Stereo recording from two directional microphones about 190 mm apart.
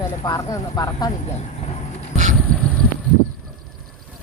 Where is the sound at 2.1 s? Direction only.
40° right (ahead or behind).